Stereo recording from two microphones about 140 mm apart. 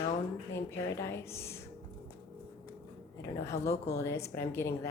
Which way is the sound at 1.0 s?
20° left (ahead or behind).